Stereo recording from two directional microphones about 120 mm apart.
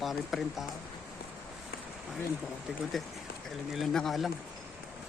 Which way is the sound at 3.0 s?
Centre (ahead or behind).